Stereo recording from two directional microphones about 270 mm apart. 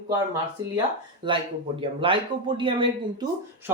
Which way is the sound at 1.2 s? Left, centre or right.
Centre.